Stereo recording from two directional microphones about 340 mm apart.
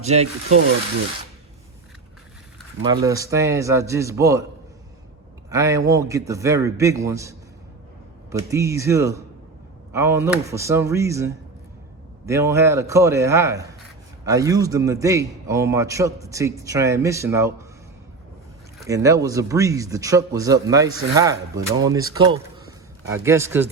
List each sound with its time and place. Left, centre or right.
0.0 s speech: centre
2.8 s speech: centre
5.5 s speech: centre
18.8 s speech: centre